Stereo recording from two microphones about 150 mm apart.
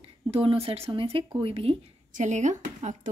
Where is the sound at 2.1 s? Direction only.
55° right (ahead or behind).